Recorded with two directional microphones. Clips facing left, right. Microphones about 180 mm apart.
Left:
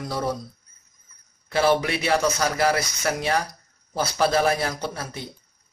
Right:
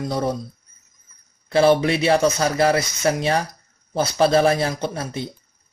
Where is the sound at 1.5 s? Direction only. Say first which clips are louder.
Right 5 dB; 25° right (ahead or behind).